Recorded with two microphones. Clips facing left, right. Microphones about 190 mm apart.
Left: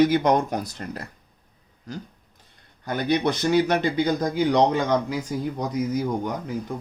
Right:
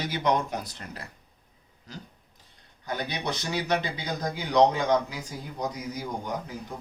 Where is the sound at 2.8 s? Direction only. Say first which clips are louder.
Left 9 dB; 55° left (ahead or behind).